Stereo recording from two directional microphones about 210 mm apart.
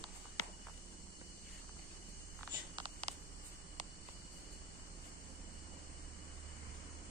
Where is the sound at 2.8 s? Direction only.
30° right (ahead or behind).